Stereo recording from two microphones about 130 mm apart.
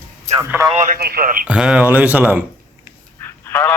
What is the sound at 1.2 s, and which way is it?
Speech, 90° right.